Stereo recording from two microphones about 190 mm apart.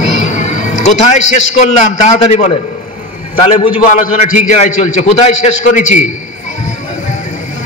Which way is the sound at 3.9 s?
40° left (ahead or behind).